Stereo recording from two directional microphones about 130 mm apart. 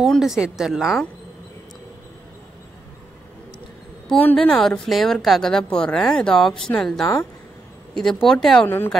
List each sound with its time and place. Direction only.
0.0 s a woman's voice: centre (ahead or behind)
4.1 s a woman's voice: 10° left (ahead or behind)
8.6 s a woman's voice: 15° left (ahead or behind)